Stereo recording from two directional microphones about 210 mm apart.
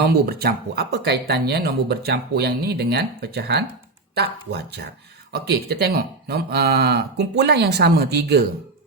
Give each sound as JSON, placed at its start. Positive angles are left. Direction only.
{"t": 0.0, "sound": "speech", "side_deg": -50}